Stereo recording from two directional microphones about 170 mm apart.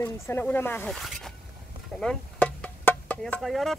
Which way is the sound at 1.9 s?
5° left (ahead or behind).